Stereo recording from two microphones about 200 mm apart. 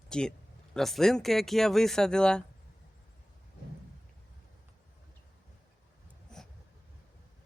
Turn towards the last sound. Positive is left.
turn(degrees=5)  # may be behind; listen again after turning